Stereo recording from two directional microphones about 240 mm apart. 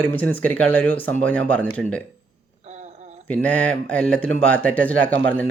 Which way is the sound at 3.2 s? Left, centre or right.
Centre.